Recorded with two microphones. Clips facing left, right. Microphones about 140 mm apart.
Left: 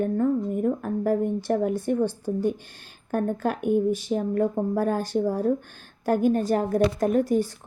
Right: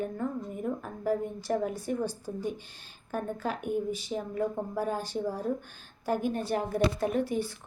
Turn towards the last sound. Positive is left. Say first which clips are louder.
# left 7 dB
turn(degrees=45)  # may be behind; listen again after turning